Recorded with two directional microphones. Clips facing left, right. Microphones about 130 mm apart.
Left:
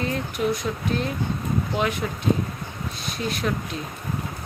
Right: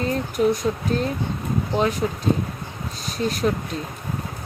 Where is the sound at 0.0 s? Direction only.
40° right (ahead or behind).